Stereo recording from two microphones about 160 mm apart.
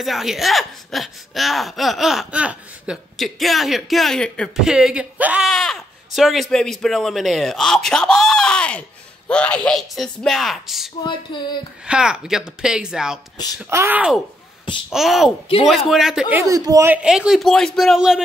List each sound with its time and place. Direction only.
0.0 s speech: centre (ahead or behind)
11.1 s a sound: 30° left (ahead or behind)
11.8 s speech: 5° right (ahead or behind)
13.7 s speech: 15° right (ahead or behind)
16.9 s speech: 5° right (ahead or behind)